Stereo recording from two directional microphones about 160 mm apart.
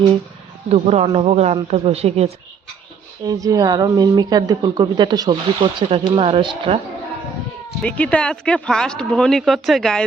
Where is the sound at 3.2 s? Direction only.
20° right (ahead or behind).